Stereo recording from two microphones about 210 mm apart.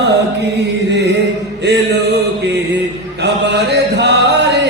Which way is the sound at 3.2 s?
55° right (ahead or behind).